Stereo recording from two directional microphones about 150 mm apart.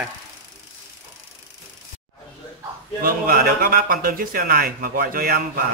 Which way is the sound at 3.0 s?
75° right (ahead or behind).